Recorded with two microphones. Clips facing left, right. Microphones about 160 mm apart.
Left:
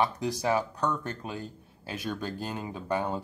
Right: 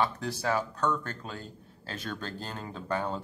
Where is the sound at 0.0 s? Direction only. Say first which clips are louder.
Left 2 dB; 15° left (ahead or behind).